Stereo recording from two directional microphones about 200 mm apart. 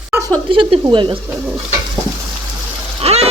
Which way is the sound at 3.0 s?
30° right (ahead or behind).